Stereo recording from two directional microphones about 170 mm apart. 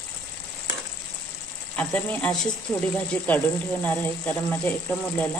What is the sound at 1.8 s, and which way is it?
Speech, 5° left (ahead or behind).